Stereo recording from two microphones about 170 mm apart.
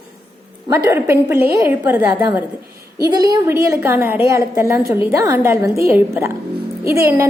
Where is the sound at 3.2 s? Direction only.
25° right (ahead or behind).